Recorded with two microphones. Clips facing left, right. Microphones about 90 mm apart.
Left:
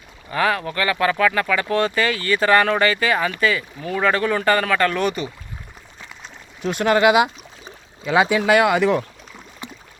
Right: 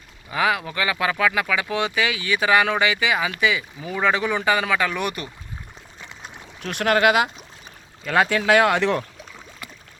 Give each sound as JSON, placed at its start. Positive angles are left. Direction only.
{"t": 0.3, "sound": "speech", "side_deg": -10}
{"t": 6.6, "sound": "speech", "side_deg": 0}
{"t": 9.6, "sound": "a sound", "side_deg": 25}